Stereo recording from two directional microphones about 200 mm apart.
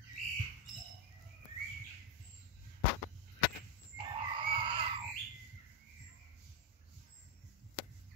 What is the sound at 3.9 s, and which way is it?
Frog, 25° right (ahead or behind).